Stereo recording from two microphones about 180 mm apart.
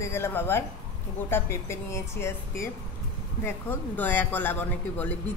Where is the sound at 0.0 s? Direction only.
15° left (ahead or behind).